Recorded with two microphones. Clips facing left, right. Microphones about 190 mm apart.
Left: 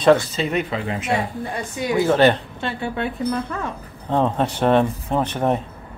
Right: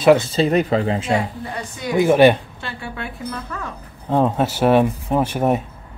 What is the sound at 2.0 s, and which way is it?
Speech, 15° right (ahead or behind).